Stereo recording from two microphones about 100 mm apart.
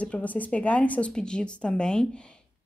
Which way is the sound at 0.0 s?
15° left (ahead or behind).